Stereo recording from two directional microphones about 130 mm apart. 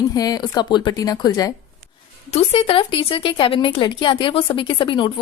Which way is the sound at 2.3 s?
50° left (ahead or behind).